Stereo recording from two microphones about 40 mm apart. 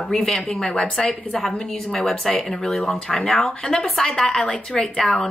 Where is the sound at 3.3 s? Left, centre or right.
Centre.